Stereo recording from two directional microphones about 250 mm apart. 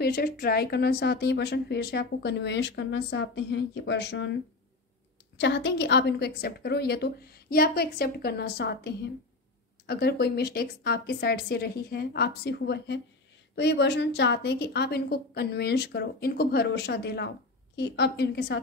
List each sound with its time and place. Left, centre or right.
0.0 s a woman's voice: left
5.4 s a woman's voice: left